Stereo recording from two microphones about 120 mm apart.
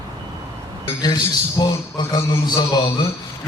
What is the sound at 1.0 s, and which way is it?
A man's voice, 35° left (ahead or behind).